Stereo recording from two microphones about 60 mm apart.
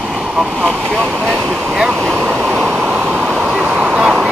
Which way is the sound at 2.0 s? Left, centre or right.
Centre.